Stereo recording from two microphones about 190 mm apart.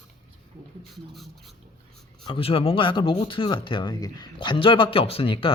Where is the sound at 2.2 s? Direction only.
30° left (ahead or behind).